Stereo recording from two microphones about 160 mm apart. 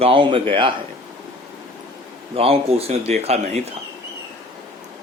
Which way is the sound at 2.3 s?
35° right (ahead or behind).